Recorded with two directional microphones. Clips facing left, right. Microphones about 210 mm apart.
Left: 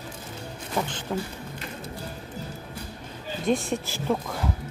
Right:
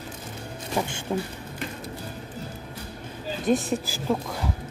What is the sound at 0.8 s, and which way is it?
Speech, 10° right (ahead or behind).